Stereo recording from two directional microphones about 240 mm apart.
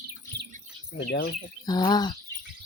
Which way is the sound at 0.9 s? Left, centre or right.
Left.